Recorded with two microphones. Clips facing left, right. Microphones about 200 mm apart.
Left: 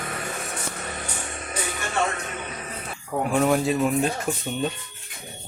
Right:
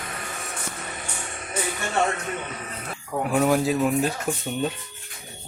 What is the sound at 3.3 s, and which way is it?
Speech, centre (ahead or behind).